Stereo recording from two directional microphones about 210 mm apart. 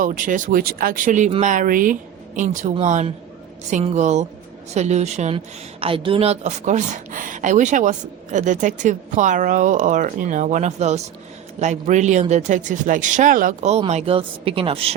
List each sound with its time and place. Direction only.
0.0 s speech: 40° right (ahead or behind)